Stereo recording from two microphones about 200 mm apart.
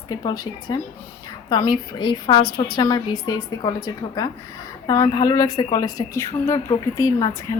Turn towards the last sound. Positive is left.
turn(degrees=15)  # may be behind; listen again after turning